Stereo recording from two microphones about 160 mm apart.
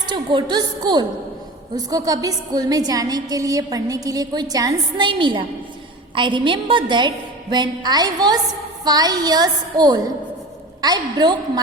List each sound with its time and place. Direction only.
0.0 s a woman's voice: 30° right (ahead or behind)